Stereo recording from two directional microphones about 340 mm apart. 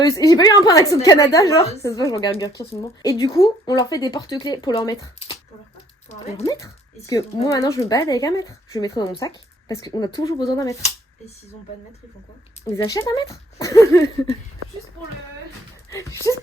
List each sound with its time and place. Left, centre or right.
0.0 s a woman's voice: centre
12.6 s a woman's voice: centre
15.9 s speech: centre